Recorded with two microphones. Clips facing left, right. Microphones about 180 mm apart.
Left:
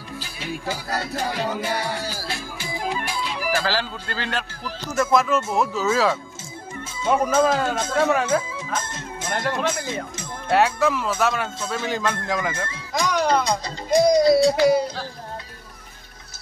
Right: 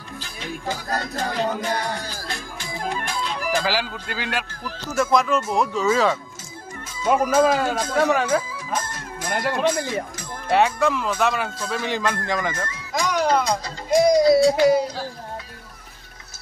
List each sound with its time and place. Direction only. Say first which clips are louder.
0.2 s music: even; 10° left (ahead or behind)
3.6 s a man's voice: right 1 dB; 10° right (ahead or behind)
4.6 s speech: even; 5° left (ahead or behind)
7.3 s speech: right 1 dB; 5° right (ahead or behind)
8.7 s music: right 2 dB; 25° left (ahead or behind)
9.6 s speech: right 4 dB; 20° right (ahead or behind)
10.5 s speech: even; 5° left (ahead or behind)